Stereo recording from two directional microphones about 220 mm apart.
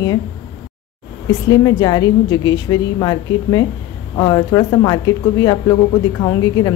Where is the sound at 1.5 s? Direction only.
15° left (ahead or behind).